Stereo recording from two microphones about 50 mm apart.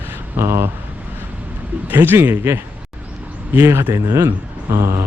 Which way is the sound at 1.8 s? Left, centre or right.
Right.